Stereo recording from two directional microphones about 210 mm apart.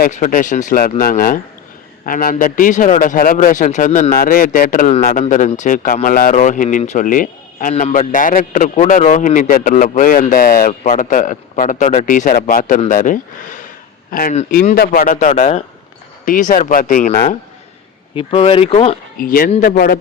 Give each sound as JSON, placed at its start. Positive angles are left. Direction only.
{"t": 0.0, "sound": "a man's voice", "side_deg": 40}
{"t": 18.1, "sound": "speech", "side_deg": 25}
{"t": 19.2, "sound": "a man's voice", "side_deg": 45}